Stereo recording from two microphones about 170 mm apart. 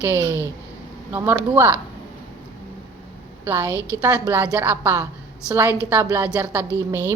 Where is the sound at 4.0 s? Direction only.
15° right (ahead or behind).